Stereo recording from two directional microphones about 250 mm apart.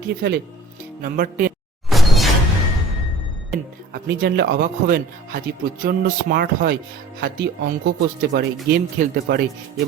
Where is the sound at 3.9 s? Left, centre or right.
Right.